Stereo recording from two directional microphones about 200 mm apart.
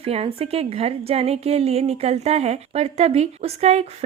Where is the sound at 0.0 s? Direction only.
30° right (ahead or behind).